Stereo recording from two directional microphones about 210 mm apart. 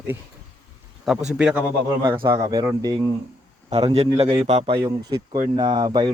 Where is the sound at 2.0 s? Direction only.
20° right (ahead or behind).